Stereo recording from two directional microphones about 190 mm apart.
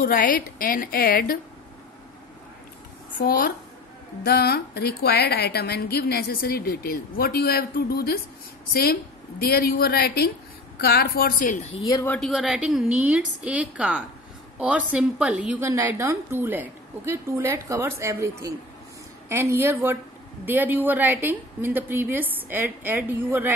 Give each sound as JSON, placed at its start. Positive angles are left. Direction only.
{"t": 0.0, "sound": "a woman's voice", "side_deg": 45}
{"t": 3.2, "sound": "a woman's voice", "side_deg": 50}
{"t": 9.4, "sound": "a woman's voice", "side_deg": 55}
{"t": 12.1, "sound": "a woman's voice", "side_deg": 0}